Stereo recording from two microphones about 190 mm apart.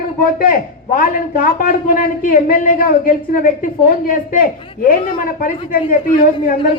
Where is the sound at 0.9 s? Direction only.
45° left (ahead or behind).